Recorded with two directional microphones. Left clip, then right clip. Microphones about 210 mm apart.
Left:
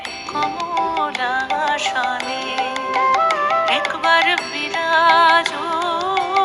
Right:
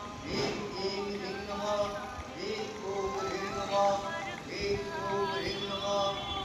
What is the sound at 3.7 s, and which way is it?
Music, 50° left (ahead or behind).